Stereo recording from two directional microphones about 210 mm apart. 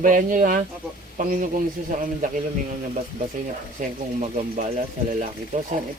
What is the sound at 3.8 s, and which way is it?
Speech, 40° right (ahead or behind).